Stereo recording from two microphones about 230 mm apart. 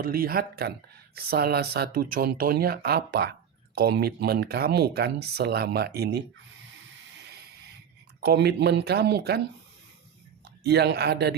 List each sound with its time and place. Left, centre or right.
0.0 s speech: right
8.2 s speech: right
10.6 s speech: right